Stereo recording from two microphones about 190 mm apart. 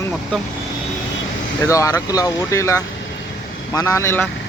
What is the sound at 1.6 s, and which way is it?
Speech, 15° left (ahead or behind).